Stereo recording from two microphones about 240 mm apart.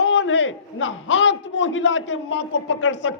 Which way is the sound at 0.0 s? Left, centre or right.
Left.